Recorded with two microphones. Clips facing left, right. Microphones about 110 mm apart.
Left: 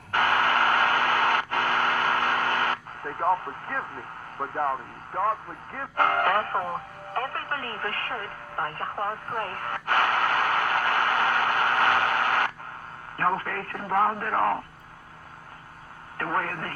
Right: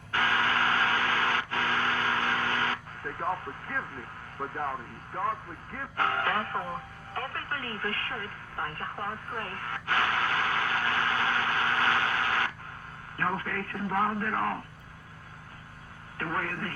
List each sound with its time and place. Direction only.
0.1 s radio: 60° left (ahead or behind)
3.0 s speech: 40° left (ahead or behind)
7.1 s radio: 45° left (ahead or behind)
13.1 s speech: 40° left (ahead or behind)
16.1 s speech: 40° left (ahead or behind)